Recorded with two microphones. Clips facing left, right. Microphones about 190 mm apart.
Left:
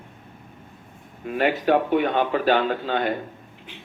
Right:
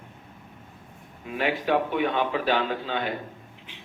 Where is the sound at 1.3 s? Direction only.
50° left (ahead or behind).